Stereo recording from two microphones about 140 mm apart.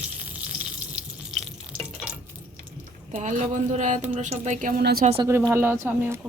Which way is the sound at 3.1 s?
60° right (ahead or behind).